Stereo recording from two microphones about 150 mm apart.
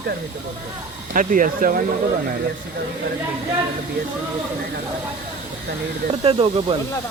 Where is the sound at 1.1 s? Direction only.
65° right (ahead or behind).